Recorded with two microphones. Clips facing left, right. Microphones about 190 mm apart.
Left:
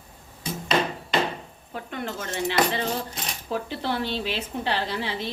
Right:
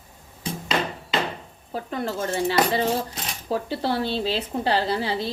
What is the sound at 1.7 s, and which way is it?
Speech, 35° right (ahead or behind).